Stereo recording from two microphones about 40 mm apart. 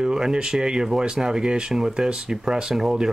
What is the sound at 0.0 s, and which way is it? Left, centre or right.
Speech, centre.